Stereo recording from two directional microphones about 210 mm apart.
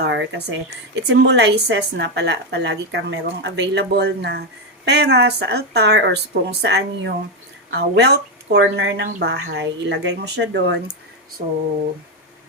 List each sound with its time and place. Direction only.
0.0 s a woman's voice: 60° right (ahead or behind)